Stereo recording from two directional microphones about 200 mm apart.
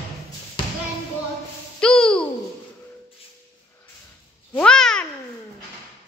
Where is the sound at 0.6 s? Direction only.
25° left (ahead or behind).